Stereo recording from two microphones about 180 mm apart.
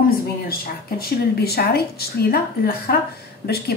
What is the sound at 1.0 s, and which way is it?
A woman's voice, 60° left (ahead or behind).